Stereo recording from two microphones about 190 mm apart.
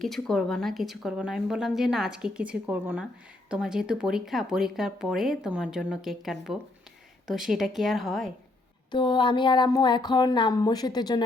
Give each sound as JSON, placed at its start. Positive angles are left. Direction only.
{"t": 0.0, "sound": "speech", "side_deg": 0}
{"t": 8.9, "sound": "speech", "side_deg": 25}